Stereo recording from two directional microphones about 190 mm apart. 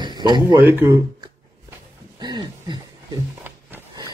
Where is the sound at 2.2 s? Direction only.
20° right (ahead or behind).